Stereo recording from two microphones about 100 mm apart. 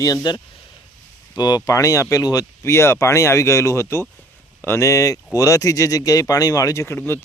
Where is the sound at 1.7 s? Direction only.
35° left (ahead or behind).